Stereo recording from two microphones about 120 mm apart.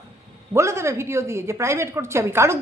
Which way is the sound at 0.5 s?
25° right (ahead or behind).